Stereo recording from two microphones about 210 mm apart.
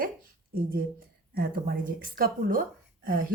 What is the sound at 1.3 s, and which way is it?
Speech, 45° right (ahead or behind).